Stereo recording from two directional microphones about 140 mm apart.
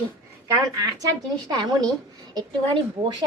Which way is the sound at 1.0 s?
30° right (ahead or behind).